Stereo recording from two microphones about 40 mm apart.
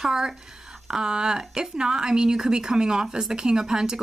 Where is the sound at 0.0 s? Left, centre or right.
Centre.